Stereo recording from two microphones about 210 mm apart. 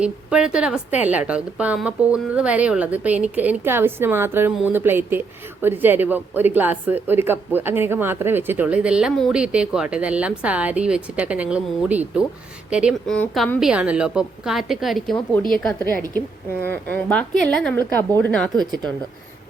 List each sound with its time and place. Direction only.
0.0 s a woman's voice: 5° right (ahead or behind)
18.5 s speech: 20° right (ahead or behind)